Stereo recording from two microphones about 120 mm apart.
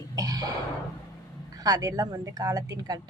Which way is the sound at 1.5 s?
30° right (ahead or behind).